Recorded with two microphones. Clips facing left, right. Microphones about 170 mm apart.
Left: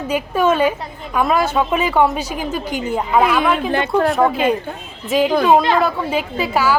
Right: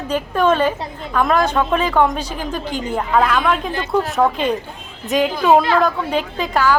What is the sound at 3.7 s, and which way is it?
Speech, 65° left (ahead or behind).